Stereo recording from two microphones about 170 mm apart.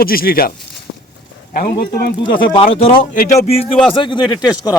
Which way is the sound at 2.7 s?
35° left (ahead or behind).